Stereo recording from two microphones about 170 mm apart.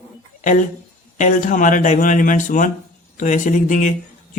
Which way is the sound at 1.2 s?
50° left (ahead or behind).